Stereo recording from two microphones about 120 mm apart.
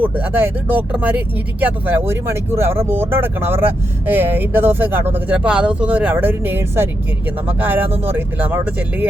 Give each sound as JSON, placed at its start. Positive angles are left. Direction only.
{"t": 0.0, "sound": "speech", "side_deg": -15}